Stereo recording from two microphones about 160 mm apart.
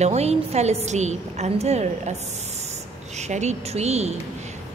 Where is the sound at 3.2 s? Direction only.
45° right (ahead or behind).